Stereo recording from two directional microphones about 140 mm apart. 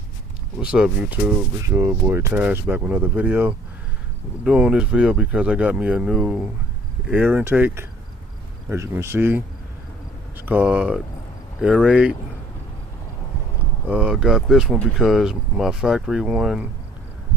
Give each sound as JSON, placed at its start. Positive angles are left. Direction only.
{"t": 0.6, "sound": "speech", "side_deg": -5}
{"t": 1.6, "sound": "speech", "side_deg": -20}
{"t": 13.8, "sound": "speech", "side_deg": -5}